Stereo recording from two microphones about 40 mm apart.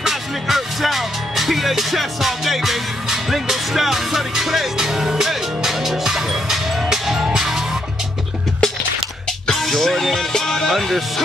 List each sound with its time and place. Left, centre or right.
0.0 s music: centre
9.5 s music: centre